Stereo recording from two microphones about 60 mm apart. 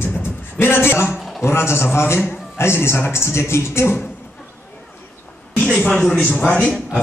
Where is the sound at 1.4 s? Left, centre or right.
Left.